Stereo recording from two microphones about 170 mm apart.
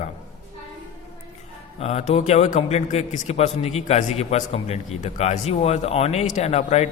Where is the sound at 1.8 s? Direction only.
40° left (ahead or behind).